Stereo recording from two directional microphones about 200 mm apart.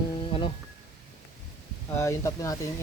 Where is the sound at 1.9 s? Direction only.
15° left (ahead or behind).